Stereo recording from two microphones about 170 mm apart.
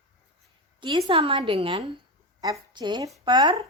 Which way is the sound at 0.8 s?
30° right (ahead or behind).